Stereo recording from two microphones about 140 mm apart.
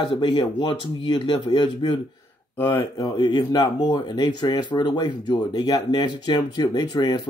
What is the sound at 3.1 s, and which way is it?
Speech, 30° left (ahead or behind).